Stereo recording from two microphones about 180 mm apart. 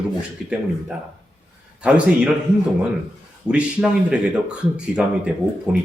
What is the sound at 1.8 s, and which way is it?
Speech, 5° right (ahead or behind).